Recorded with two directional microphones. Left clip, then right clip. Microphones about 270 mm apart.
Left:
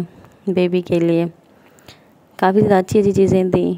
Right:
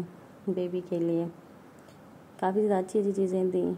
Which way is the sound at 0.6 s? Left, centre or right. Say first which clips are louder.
Left 15 dB; left.